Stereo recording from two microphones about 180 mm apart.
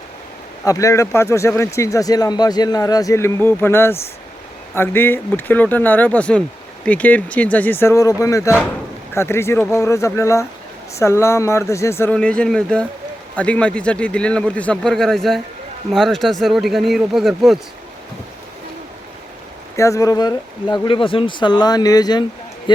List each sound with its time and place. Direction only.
0.6 s speech: 20° left (ahead or behind); by 17.6 s centre (ahead or behind)
19.7 s speech: 15° left (ahead or behind)